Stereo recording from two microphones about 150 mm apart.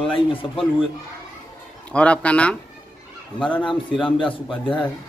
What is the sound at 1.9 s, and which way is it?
Speech, 10° left (ahead or behind).